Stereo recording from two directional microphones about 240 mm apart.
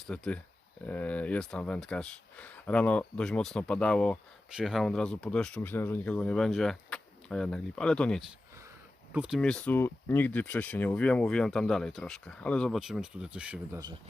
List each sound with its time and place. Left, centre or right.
0.1 s speech: centre